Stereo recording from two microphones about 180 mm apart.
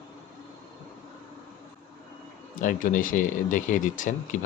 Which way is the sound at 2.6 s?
45° left (ahead or behind).